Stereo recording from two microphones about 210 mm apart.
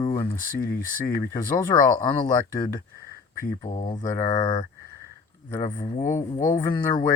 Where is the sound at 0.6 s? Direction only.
45° left (ahead or behind).